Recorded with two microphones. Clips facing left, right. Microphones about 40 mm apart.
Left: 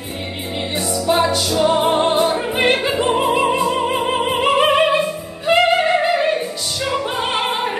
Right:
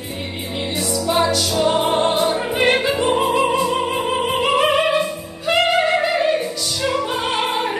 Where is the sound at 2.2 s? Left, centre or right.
Left.